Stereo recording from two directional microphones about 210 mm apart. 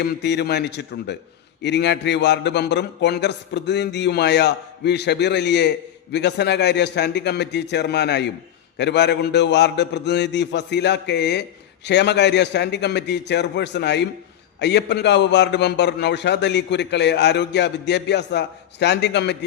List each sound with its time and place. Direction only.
0.0 s a man's voice: 50° left (ahead or behind)